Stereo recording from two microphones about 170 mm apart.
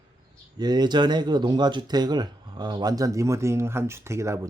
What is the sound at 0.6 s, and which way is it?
Speech, 25° right (ahead or behind).